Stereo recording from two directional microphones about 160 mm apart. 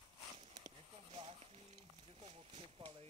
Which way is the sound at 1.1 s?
40° right (ahead or behind).